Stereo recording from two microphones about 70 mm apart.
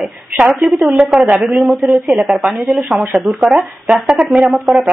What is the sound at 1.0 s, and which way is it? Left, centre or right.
Speech, centre.